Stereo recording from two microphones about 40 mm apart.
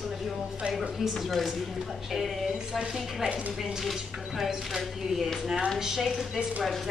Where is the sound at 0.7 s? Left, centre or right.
Centre.